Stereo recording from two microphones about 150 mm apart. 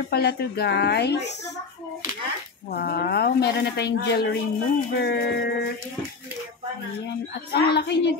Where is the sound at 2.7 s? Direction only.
90° left.